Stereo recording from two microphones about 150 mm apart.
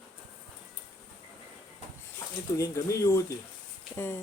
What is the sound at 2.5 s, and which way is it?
Speech, 25° left (ahead or behind).